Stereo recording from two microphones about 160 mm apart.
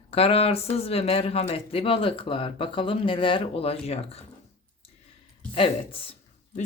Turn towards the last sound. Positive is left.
turn(degrees=35)  # may be behind; listen again after turning